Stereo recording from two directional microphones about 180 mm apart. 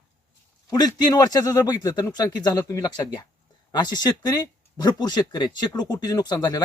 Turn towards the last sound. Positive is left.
turn(degrees=20)  # may be behind; listen again after turning